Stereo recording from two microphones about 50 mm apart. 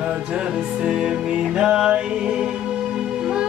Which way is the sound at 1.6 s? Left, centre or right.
Centre.